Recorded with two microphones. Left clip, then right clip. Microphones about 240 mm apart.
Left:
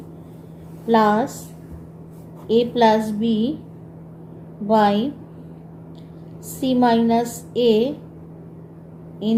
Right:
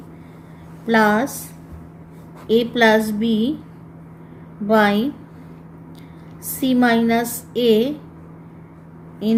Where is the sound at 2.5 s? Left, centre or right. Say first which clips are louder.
Right 1 dB; right.